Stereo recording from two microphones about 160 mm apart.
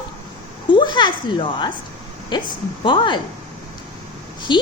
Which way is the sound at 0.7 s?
30° left (ahead or behind).